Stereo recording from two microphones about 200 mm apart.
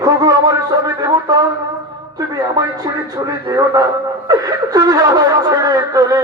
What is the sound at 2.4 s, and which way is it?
Speech, 20° right (ahead or behind).